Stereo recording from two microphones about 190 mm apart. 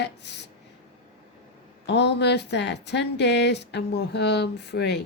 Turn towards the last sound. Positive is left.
turn(degrees=60)  # may be behind; listen again after turning